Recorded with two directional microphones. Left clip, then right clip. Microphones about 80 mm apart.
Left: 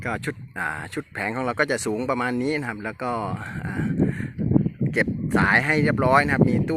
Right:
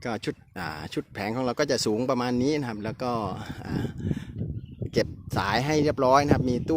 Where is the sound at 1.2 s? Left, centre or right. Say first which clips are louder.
Left 3 dB; right.